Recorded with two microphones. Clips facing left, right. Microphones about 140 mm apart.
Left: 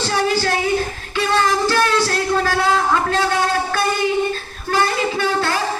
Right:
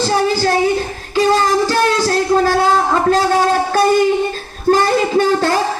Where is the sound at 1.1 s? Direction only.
35° right (ahead or behind).